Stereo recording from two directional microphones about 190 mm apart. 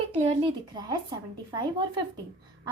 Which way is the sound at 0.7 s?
20° right (ahead or behind).